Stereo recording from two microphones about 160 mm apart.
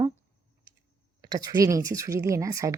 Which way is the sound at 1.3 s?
25° right (ahead or behind).